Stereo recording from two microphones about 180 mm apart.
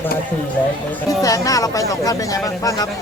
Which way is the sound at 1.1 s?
20° left (ahead or behind).